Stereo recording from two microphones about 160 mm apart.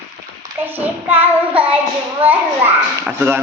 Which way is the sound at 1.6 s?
10° right (ahead or behind).